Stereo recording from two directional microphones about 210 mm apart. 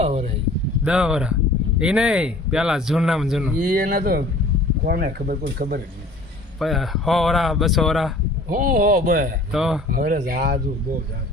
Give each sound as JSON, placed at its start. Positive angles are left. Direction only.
{"t": 0.0, "sound": "speech", "side_deg": -30}
{"t": 0.9, "sound": "speech", "side_deg": -5}
{"t": 3.6, "sound": "speech", "side_deg": -40}
{"t": 6.6, "sound": "speech", "side_deg": 0}
{"t": 8.4, "sound": "speech", "side_deg": -40}
{"t": 9.5, "sound": "speech", "side_deg": -5}
{"t": 9.9, "sound": "speech", "side_deg": -40}